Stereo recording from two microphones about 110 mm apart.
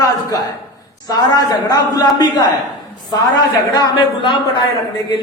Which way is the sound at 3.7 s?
45° left (ahead or behind).